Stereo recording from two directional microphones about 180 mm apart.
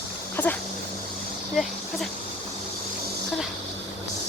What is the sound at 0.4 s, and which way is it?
Dog, 10° left (ahead or behind).